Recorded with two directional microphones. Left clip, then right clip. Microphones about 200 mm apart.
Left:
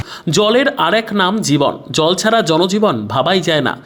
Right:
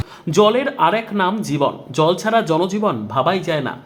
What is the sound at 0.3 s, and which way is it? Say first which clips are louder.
Speech: left 2 dB; 20° left (ahead or behind).